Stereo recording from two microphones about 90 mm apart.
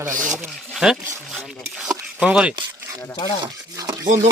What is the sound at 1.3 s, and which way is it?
Rub, 5° left (ahead or behind).